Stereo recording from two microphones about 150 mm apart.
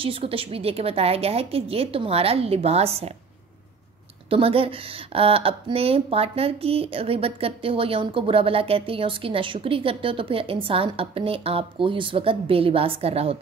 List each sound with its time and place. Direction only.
0.0 s a woman's voice: 35° right (ahead or behind)
4.3 s a woman's voice: 40° right (ahead or behind)